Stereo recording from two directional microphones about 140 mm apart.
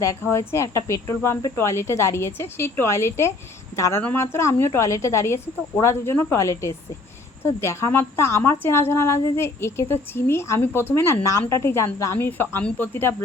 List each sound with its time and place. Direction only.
0.0 s a woman's voice: 20° left (ahead or behind)